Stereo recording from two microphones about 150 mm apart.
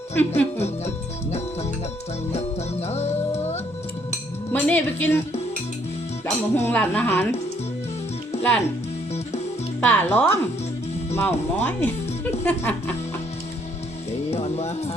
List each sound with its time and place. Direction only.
0.1 s speech: 15° left (ahead or behind)
0.6 s music: 45° left (ahead or behind)
4.5 s speech: 10° left (ahead or behind)
6.2 s speech: 15° left (ahead or behind)
9.8 s speech: 15° left (ahead or behind)
14.3 s speech: 45° left (ahead or behind)